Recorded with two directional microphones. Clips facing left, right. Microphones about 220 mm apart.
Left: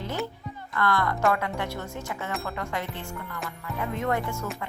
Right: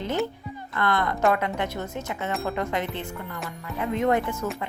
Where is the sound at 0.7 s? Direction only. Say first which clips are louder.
Right 1 dB; 20° right (ahead or behind).